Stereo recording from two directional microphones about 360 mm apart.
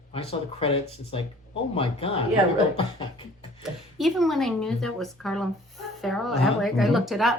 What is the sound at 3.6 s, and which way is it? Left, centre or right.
Speech, centre.